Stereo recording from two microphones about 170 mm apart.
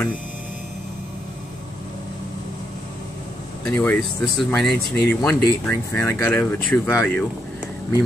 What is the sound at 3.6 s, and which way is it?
Speech, 10° left (ahead or behind).